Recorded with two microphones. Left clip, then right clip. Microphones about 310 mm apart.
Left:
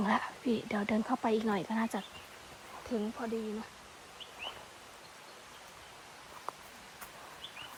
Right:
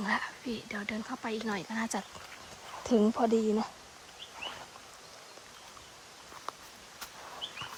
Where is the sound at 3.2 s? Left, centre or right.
Centre.